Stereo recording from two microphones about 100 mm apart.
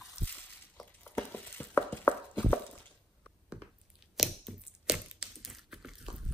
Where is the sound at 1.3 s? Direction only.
20° left (ahead or behind).